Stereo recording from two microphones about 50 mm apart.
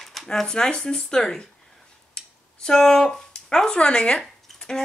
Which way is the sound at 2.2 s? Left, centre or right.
Centre.